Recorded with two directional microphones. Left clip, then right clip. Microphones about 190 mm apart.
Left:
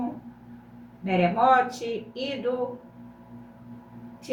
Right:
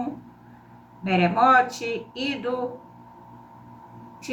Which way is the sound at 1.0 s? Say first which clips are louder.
Right 2 dB; 30° right (ahead or behind).